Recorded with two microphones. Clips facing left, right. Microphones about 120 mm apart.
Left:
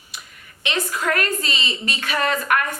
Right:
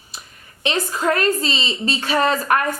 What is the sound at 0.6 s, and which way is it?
A woman's voice, 30° right (ahead or behind).